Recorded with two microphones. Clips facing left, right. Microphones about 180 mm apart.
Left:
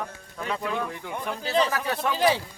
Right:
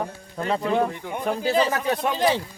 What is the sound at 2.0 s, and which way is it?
Speech, 20° right (ahead or behind).